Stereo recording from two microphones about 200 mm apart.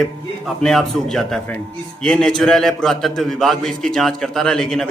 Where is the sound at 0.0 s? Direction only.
Centre (ahead or behind).